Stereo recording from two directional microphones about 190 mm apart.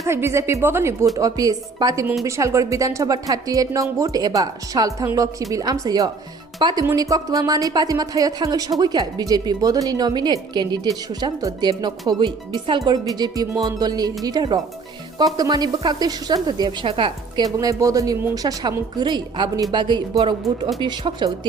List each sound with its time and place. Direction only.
0.0 s a woman's voice: 15° right (ahead or behind)